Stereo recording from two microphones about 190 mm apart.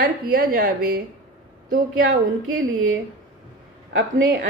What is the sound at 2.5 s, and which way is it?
A woman's voice, 90° right.